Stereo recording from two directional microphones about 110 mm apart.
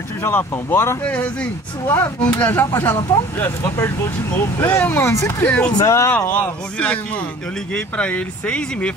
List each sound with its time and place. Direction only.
0.2 s speech: 15° left (ahead or behind)
5.4 s speech: 10° left (ahead or behind)
5.7 s speech: 30° left (ahead or behind)
6.1 s speech: 15° left (ahead or behind)